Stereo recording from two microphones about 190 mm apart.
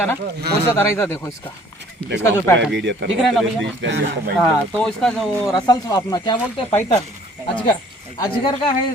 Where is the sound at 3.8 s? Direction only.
65° right (ahead or behind).